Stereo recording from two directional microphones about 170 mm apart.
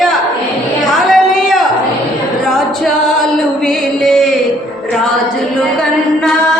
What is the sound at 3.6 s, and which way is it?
Speech, 5° left (ahead or behind).